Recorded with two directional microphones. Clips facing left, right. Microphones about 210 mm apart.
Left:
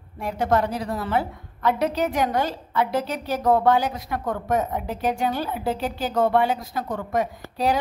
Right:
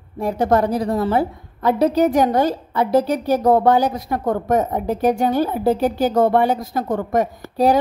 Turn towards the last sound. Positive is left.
turn(degrees=-40)  # may be behind; listen again after turning